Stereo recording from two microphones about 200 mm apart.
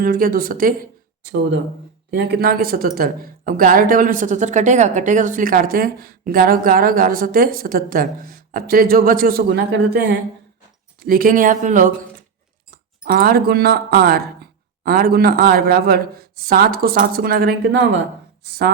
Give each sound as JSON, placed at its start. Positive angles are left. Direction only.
{"t": 0.0, "sound": "speech", "side_deg": -45}
{"t": 1.2, "sound": "speech", "side_deg": -60}
{"t": 11.0, "sound": "speech", "side_deg": -45}